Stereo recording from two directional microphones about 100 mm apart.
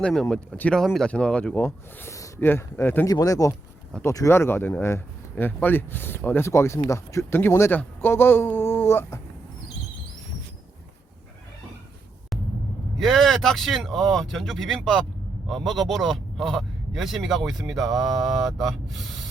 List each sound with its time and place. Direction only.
0.0 s speech: 5° left (ahead or behind)
1.6 s speech: 25° left (ahead or behind)
3.1 s speech: 35° left (ahead or behind)
13.0 s speech: centre (ahead or behind)